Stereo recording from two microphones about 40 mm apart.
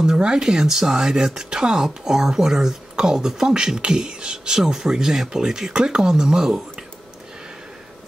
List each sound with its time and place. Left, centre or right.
0.2 s speech: centre